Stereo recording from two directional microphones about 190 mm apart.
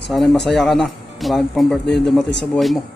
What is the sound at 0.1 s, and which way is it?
Mantra, centre (ahead or behind).